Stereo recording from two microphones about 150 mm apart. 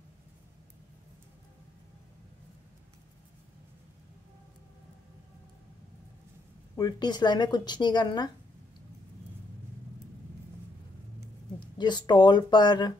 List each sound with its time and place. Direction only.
6.8 s speech: 30° left (ahead or behind)
11.6 s speech: 30° left (ahead or behind)